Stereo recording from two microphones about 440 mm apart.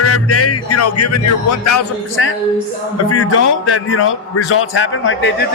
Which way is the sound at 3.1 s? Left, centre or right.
Left.